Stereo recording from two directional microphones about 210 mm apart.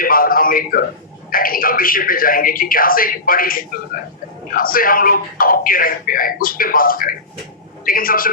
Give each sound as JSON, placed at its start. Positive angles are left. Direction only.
{"t": 0.0, "sound": "a man's voice", "side_deg": 45}